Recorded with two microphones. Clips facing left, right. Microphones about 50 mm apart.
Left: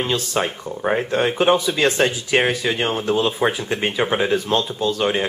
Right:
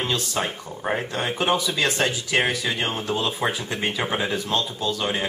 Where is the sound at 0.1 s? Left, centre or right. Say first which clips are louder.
Left 4 dB; centre.